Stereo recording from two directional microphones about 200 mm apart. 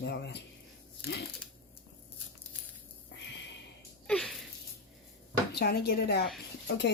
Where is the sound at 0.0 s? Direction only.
55° left (ahead or behind).